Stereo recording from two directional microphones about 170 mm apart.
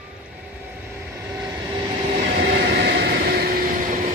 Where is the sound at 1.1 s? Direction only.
10° right (ahead or behind).